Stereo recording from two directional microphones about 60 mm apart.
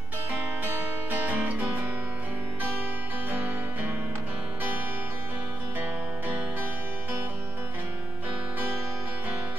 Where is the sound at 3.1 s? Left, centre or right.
Right.